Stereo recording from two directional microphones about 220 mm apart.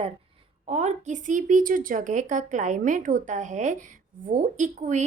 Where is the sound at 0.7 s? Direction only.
30° right (ahead or behind).